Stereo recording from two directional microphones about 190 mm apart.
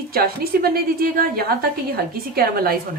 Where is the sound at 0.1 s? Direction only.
55° right (ahead or behind).